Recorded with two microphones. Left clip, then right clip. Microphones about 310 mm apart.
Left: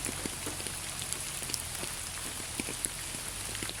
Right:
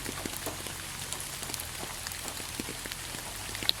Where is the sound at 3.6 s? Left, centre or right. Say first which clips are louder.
Right 13 dB; centre.